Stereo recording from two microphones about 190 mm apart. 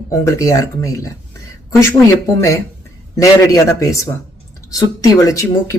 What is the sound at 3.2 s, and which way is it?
Speech, 15° left (ahead or behind).